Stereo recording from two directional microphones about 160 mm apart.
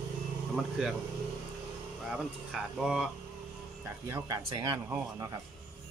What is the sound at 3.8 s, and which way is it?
Speech, 15° right (ahead or behind).